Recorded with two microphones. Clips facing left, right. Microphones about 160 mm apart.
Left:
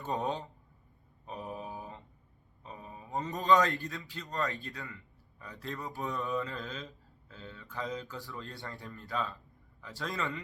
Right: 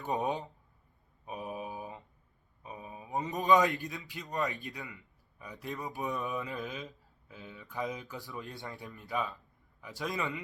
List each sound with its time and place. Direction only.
0.0 s speech: 20° right (ahead or behind)
1.2 s a sound: 15° right (ahead or behind)
2.6 s a man's voice: 20° right (ahead or behind)